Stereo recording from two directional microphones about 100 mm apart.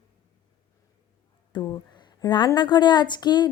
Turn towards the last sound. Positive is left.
turn(degrees=45)  # may be behind; listen again after turning